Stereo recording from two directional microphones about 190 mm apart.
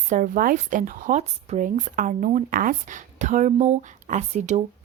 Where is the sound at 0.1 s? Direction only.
45° right (ahead or behind).